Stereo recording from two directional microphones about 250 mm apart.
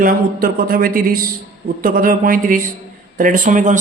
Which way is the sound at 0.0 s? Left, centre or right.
Right.